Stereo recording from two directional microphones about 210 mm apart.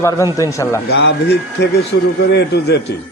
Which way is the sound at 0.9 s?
55° left (ahead or behind).